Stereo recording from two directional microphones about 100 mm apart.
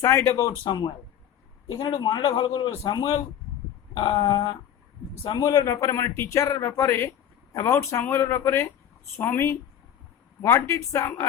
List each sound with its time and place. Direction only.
0.0 s speech: 25° left (ahead or behind)
0.6 s speech: 55° left (ahead or behind)
1.8 s speech: 40° left (ahead or behind)
2.2 s a man's voice: 60° left (ahead or behind)
5.4 s speech: 35° left (ahead or behind)